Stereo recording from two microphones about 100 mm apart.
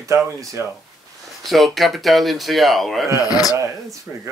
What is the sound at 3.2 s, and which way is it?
Speech, 40° left (ahead or behind).